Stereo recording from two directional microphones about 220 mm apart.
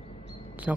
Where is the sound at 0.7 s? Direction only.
5° right (ahead or behind).